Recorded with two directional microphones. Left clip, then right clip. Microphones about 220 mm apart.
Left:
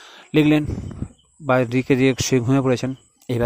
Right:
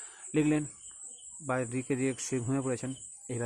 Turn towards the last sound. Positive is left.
turn(degrees=40)  # may be behind; listen again after turning